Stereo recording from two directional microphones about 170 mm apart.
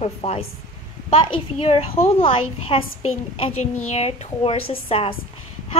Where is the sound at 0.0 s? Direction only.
40° left (ahead or behind).